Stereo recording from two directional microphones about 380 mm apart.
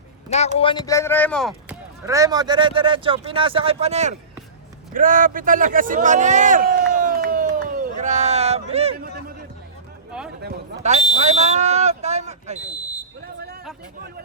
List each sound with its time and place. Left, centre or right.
0.3 s speech: centre
2.0 s a man's voice: centre
10.4 s a sound: right